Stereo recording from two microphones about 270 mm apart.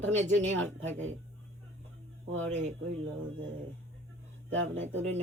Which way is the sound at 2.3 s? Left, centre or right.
Right.